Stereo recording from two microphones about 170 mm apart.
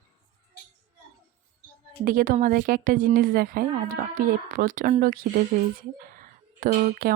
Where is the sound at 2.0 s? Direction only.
55° right (ahead or behind).